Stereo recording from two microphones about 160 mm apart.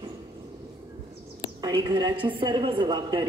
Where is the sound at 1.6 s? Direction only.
25° right (ahead or behind).